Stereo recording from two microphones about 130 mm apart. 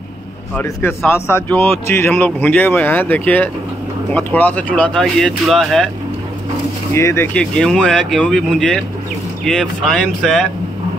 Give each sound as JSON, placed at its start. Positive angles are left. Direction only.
{"t": 0.6, "sound": "speech", "side_deg": 15}
{"t": 6.9, "sound": "speech", "side_deg": 20}
{"t": 7.3, "sound": "speech", "side_deg": 5}